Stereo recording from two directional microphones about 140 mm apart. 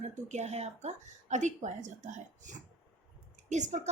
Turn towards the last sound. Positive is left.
turn(degrees=-60)  # may be behind; listen again after turning